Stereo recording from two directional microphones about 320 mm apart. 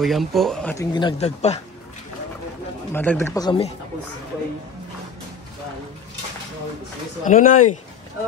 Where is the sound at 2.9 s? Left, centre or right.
Centre.